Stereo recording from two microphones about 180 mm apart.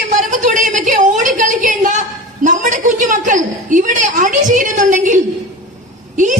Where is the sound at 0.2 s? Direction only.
45° right (ahead or behind).